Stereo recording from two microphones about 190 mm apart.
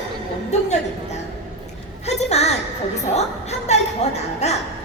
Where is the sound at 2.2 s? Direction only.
35° left (ahead or behind).